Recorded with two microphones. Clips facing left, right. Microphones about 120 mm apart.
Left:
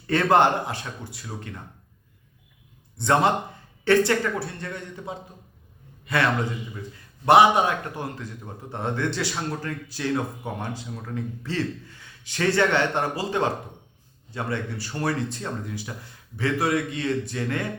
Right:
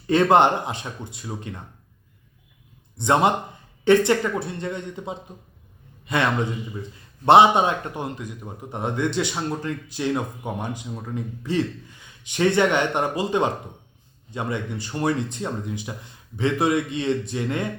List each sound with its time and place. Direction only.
0.1 s speech: 20° right (ahead or behind)
3.0 s a man's voice: 20° right (ahead or behind)